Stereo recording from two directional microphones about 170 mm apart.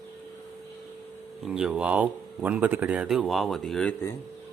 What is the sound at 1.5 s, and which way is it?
Speech, 5° right (ahead or behind).